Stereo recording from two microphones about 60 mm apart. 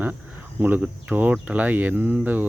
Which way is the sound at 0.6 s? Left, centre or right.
Right.